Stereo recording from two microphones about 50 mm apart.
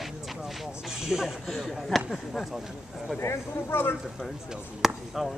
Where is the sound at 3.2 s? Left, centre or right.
Left.